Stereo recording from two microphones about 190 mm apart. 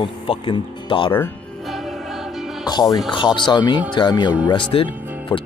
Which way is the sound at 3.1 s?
25° left (ahead or behind).